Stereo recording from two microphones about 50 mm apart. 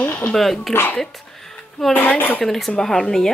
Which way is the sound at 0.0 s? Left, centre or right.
Left.